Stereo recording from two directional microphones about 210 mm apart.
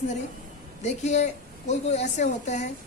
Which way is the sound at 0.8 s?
35° left (ahead or behind).